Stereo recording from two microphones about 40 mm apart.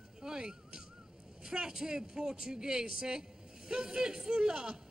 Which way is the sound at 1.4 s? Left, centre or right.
Centre.